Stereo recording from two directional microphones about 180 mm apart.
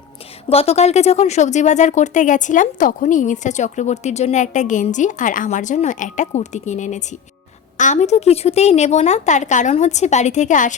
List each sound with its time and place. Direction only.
0.4 s speech: 35° left (ahead or behind)